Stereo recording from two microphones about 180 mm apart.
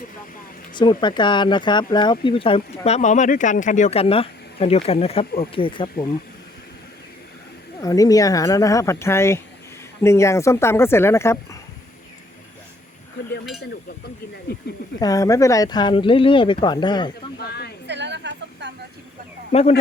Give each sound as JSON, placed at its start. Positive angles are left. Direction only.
{"t": 0.7, "sound": "speech", "side_deg": 25}
{"t": 7.8, "sound": "speech", "side_deg": 20}
{"t": 14.9, "sound": "speech", "side_deg": 20}
{"t": 17.3, "sound": "a sound", "side_deg": 60}
{"t": 17.8, "sound": "a sound", "side_deg": -75}
{"t": 19.5, "sound": "speech", "side_deg": 35}